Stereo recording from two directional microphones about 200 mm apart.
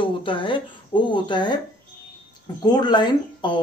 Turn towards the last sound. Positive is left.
turn(degrees=20)  # may be behind; listen again after turning